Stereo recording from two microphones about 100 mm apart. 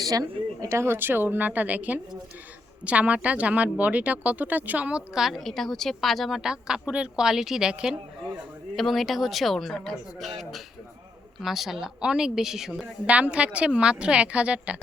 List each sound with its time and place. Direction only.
0.0 s speech: 35° right (ahead or behind); by 12.9 s 5° right (ahead or behind)
13.1 s speech: 15° right (ahead or behind)